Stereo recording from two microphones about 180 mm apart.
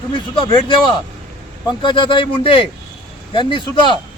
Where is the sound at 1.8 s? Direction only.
25° left (ahead or behind).